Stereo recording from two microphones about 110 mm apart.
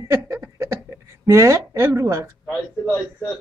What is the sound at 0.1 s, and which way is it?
Laughter, 25° right (ahead or behind).